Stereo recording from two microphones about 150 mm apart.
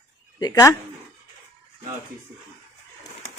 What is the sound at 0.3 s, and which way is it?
Speech, 25° left (ahead or behind).